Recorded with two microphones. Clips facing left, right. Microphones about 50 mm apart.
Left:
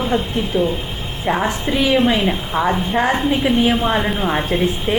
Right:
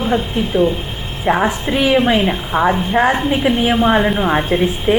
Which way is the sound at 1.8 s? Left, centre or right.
Right.